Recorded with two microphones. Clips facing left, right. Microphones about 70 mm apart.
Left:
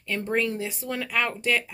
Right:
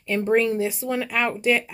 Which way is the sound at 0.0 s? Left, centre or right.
Right.